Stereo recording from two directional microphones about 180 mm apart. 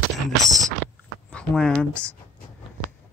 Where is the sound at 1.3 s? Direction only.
5° left (ahead or behind).